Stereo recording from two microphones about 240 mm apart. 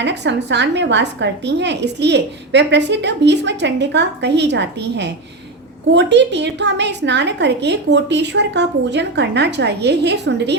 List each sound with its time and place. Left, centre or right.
0.0 s a woman's voice: right